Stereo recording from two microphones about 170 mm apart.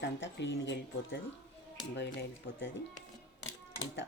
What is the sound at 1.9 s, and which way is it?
Speech, 90° left.